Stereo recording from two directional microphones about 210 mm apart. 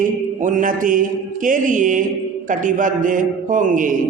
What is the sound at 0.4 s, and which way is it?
Mantra, 40° right (ahead or behind).